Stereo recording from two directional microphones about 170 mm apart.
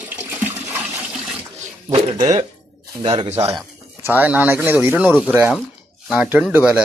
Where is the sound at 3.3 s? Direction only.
15° right (ahead or behind).